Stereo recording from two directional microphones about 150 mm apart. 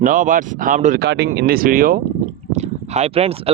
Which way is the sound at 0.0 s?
60° right (ahead or behind).